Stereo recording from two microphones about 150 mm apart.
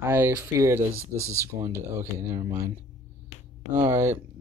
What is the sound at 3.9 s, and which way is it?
Speech, 20° right (ahead or behind).